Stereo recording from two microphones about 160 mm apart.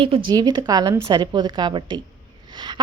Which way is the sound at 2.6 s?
25° right (ahead or behind).